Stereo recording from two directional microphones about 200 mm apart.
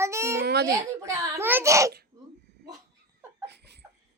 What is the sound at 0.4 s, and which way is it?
Baby cry, 55° right (ahead or behind).